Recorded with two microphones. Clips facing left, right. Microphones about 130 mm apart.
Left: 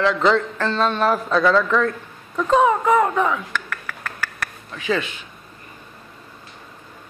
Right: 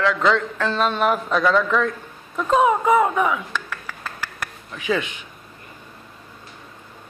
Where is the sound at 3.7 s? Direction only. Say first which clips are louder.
Left 1 dB; 20° right (ahead or behind).